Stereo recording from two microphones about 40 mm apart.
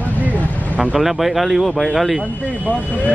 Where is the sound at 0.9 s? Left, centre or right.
Centre.